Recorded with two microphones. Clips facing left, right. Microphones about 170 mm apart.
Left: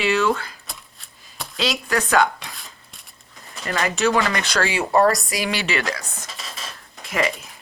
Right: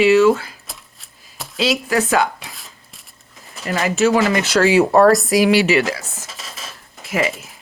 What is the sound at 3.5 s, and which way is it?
Speech, 5° right (ahead or behind).